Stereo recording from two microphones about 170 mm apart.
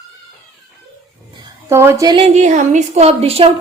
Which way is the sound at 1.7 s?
15° right (ahead or behind).